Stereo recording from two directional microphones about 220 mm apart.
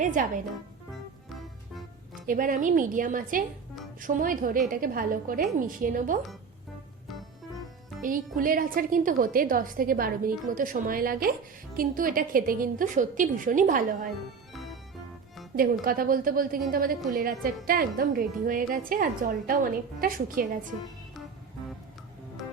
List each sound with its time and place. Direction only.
0.0 s a woman's voice: 35° right (ahead or behind)
2.2 s a woman's voice: 40° right (ahead or behind)
8.0 s a woman's voice: 40° right (ahead or behind)
14.5 s music: centre (ahead or behind)
15.8 s a woman's voice: 40° right (ahead or behind)